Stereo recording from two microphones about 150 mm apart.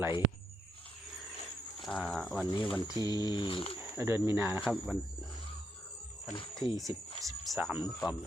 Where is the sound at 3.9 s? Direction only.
15° right (ahead or behind).